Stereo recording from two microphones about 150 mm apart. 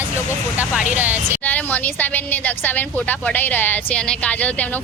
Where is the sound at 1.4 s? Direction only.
10° left (ahead or behind).